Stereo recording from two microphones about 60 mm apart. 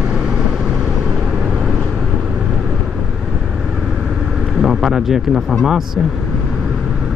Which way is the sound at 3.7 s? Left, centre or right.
Centre.